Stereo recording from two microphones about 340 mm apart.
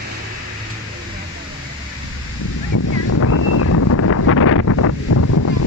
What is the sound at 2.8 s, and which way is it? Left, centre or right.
Wind noise, left.